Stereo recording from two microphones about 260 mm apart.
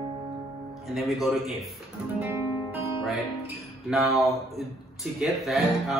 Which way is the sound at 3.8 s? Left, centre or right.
Centre.